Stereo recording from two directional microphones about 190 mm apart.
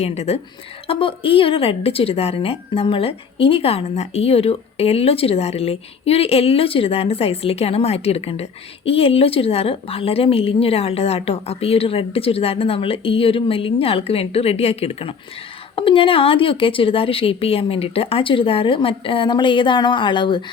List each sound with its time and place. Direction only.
0.0 s a woman's voice: 35° left (ahead or behind)